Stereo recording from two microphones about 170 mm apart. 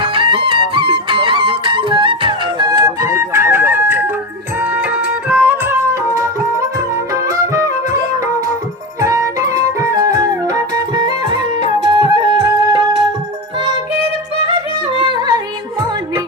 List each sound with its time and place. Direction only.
0.0 s music: 30° right (ahead or behind)
9.0 s music: 20° right (ahead or behind)
14.4 s yodeling: 30° right (ahead or behind)